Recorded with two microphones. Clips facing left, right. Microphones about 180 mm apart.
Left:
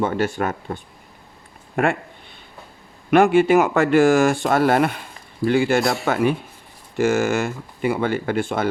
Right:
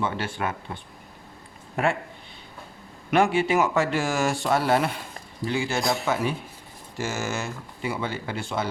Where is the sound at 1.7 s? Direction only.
55° left (ahead or behind).